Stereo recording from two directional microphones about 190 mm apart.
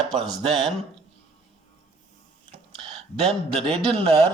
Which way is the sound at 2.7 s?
30° right (ahead or behind).